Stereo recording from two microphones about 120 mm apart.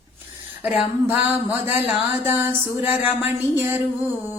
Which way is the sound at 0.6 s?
5° right (ahead or behind).